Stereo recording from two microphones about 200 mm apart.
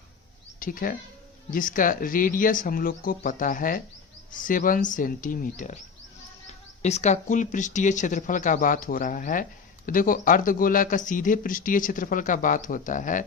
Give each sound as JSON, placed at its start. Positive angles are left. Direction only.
{"t": 0.6, "sound": "speech", "side_deg": 45}